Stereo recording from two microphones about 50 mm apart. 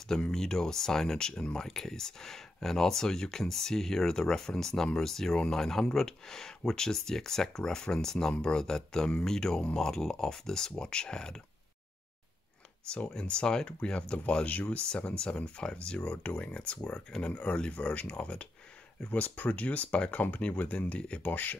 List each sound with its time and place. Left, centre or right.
0.1 s speech: centre
13.1 s speech: centre
21.2 s speech: left